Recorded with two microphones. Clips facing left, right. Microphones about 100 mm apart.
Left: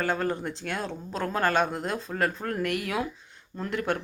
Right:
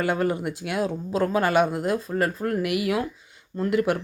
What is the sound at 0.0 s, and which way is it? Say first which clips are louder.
Speech: right 4 dB; 10° right (ahead or behind).